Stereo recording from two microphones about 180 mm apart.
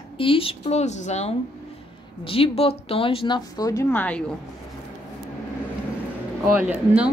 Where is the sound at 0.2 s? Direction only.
30° left (ahead or behind); by 4.2 s 10° left (ahead or behind).